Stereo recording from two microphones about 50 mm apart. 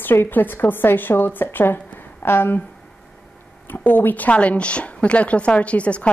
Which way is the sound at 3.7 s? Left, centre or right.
Left.